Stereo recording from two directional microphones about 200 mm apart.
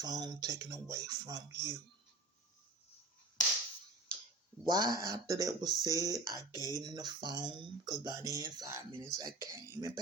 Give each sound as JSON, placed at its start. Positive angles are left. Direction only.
{"t": 0.0, "sound": "speech", "side_deg": -20}
{"t": 4.6, "sound": "speech", "side_deg": -20}